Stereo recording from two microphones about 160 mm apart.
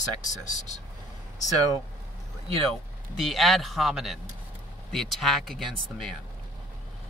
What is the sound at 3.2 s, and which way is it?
Speech, centre (ahead or behind).